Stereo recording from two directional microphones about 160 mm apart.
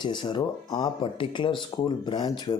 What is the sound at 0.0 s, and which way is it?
Speech, 30° left (ahead or behind).